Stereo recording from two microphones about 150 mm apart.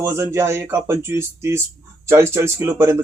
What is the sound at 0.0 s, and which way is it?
Speech, 15° right (ahead or behind).